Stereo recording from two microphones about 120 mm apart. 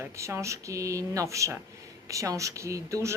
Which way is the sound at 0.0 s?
25° right (ahead or behind).